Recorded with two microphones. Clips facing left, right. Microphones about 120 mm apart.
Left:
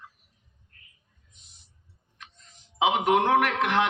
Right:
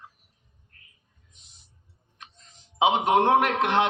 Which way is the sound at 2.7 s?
25° right (ahead or behind).